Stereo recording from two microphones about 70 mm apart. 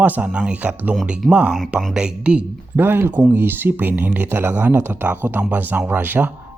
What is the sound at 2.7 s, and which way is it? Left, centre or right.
A man's voice, right.